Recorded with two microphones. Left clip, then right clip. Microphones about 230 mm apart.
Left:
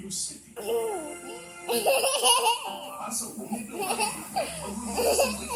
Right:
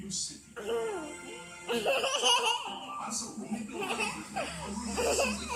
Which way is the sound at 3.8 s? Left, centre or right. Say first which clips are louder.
Left 5 dB; centre.